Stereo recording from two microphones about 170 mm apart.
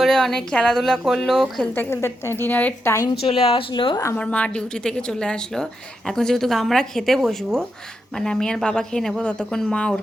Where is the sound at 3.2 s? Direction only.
35° left (ahead or behind).